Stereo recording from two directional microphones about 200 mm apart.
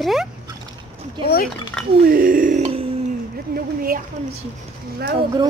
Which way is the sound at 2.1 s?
45° right (ahead or behind).